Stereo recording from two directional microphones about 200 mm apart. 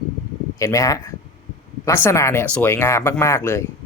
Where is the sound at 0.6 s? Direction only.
15° left (ahead or behind).